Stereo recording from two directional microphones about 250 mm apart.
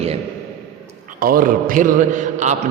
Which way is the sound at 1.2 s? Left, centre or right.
Right.